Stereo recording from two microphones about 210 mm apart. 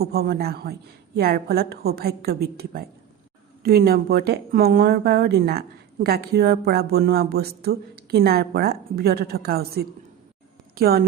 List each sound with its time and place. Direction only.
0.0 s a woman's voice: 50° right (ahead or behind)